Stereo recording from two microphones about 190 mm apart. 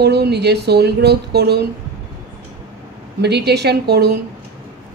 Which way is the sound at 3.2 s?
60° right (ahead or behind).